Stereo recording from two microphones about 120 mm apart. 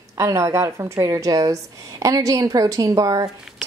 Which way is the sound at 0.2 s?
25° right (ahead or behind).